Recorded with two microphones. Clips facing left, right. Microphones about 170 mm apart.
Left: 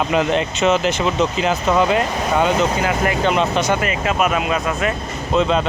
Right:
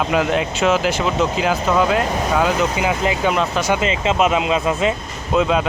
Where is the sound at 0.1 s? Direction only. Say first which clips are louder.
Even; 5° right (ahead or behind).